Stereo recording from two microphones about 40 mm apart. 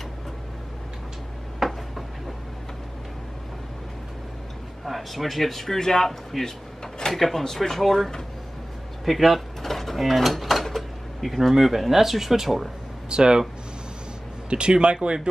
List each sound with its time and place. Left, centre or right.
1.6 s a sound: centre
4.8 s a man's voice: centre
13.1 s speech: right
14.5 s speech: right